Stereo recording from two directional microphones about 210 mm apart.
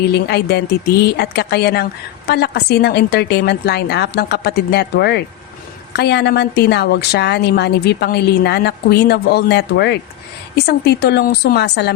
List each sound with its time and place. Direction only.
0.1 s a woman's voice: 50° left (ahead or behind)